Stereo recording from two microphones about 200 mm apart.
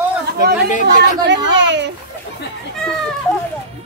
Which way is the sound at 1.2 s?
60° right (ahead or behind).